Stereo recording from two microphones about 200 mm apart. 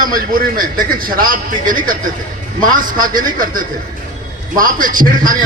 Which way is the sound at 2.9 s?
45° right (ahead or behind).